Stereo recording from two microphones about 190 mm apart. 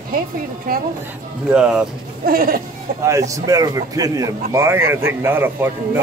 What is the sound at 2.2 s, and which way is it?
Speech, 50° right (ahead or behind).